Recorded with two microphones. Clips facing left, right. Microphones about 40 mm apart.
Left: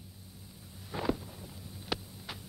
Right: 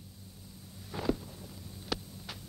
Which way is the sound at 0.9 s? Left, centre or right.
Centre.